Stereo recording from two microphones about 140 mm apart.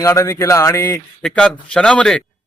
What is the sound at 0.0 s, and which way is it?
Speech, 20° left (ahead or behind).